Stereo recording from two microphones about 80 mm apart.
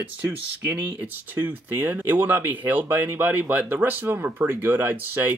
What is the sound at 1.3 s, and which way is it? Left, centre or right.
Speech, right.